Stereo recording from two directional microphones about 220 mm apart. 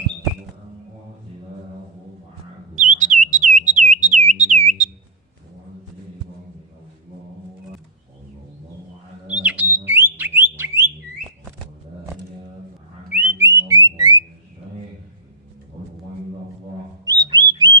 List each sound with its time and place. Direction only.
2.7 s bird: 35° right (ahead or behind)
4.4 s a sound: 30° right (ahead or behind)
9.2 s bird: 5° right (ahead or behind)
10.5 s a sound: 10° right (ahead or behind)
13.1 s music: 10° right (ahead or behind)
17.1 s bird: 15° right (ahead or behind)